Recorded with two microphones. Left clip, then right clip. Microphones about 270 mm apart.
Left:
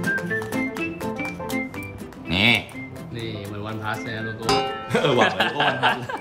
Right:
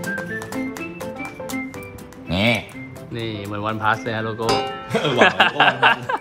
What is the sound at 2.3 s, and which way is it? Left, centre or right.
Music, right.